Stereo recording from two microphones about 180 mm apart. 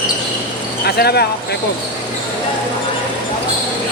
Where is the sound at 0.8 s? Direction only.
65° left (ahead or behind).